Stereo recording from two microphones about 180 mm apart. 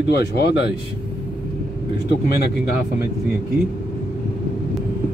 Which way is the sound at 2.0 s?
60° left (ahead or behind).